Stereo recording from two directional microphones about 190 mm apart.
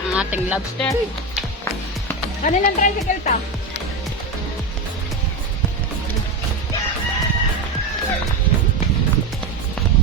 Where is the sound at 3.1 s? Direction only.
40° left (ahead or behind).